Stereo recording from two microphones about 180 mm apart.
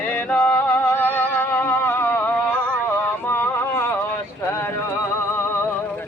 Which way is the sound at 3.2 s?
10° left (ahead or behind).